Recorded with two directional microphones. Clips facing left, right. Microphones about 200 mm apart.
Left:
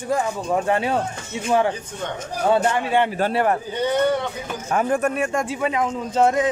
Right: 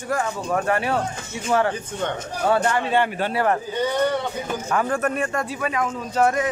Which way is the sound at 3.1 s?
30° left (ahead or behind).